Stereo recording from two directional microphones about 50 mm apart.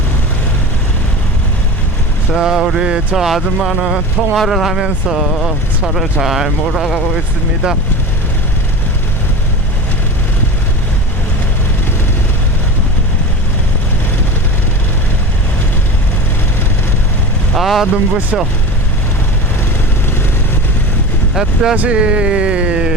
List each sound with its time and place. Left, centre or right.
2.3 s speech: centre
3.2 s speech: centre
17.6 s speech: centre
21.3 s speech: centre
21.8 s speech: right